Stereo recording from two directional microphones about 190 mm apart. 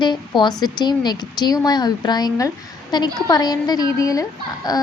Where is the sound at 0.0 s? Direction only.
25° left (ahead or behind).